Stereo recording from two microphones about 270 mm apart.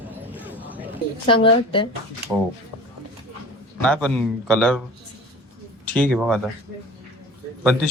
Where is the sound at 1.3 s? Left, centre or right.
Centre.